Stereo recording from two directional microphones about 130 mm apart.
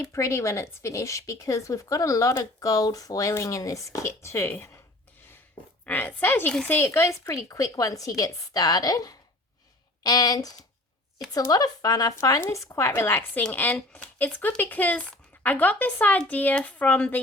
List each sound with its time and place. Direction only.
0.0 s speech: 20° left (ahead or behind)
5.8 s speech: 15° left (ahead or behind)